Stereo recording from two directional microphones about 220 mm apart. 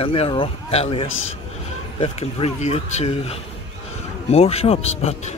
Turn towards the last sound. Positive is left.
turn(degrees=30)  # may be behind; listen again after turning